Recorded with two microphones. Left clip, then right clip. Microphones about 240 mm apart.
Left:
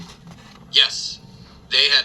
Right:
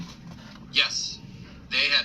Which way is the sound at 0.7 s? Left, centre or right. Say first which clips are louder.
Left 7 dB; left.